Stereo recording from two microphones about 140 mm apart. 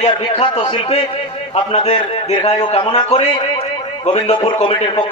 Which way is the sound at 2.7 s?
50° left (ahead or behind).